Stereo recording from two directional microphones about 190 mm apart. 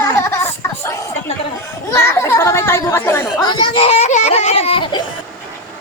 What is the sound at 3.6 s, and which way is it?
Children playing, 30° left (ahead or behind).